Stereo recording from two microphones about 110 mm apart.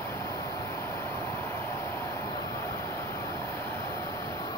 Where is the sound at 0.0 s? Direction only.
30° left (ahead or behind).